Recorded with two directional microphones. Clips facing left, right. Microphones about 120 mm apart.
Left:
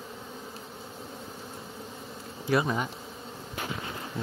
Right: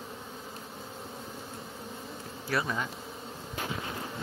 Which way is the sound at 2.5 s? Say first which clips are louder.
Left 5 dB; 20° left (ahead or behind).